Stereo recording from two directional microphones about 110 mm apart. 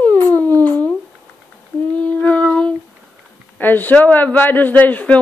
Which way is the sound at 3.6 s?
15° left (ahead or behind).